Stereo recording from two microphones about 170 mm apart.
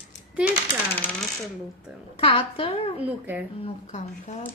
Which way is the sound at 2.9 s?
10° right (ahead or behind).